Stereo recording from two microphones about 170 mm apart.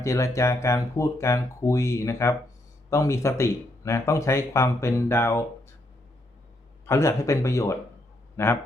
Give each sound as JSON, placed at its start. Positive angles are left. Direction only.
{"t": 0.0, "sound": "speech", "side_deg": 15}
{"t": 6.8, "sound": "speech", "side_deg": 15}